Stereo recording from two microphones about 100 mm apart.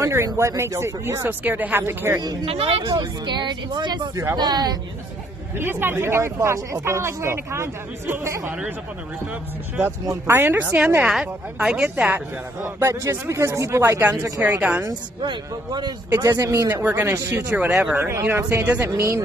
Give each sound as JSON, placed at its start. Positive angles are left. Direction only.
{"t": 0.0, "sound": "speech", "side_deg": -30}
{"t": 2.4, "sound": "speech", "side_deg": -70}
{"t": 2.9, "sound": "speech", "side_deg": -45}
{"t": 5.6, "sound": "speech", "side_deg": -20}
{"t": 10.0, "sound": "a woman's voice", "side_deg": -25}
{"t": 12.7, "sound": "speech", "side_deg": -30}
{"t": 14.4, "sound": "a woman's voice", "side_deg": -15}
{"t": 14.9, "sound": "speech", "side_deg": -45}
{"t": 16.2, "sound": "speech", "side_deg": -35}
{"t": 17.2, "sound": "speech", "side_deg": -35}
{"t": 17.5, "sound": "a woman's voice", "side_deg": -15}
{"t": 18.9, "sound": "speech", "side_deg": -30}